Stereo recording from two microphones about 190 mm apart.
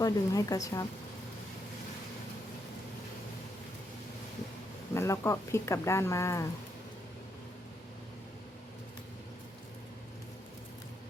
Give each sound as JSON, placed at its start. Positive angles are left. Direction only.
{"t": 0.0, "sound": "speech", "side_deg": 20}
{"t": 4.9, "sound": "speech", "side_deg": 15}